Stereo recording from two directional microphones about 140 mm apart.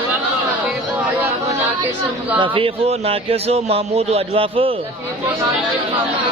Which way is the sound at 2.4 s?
40° right (ahead or behind).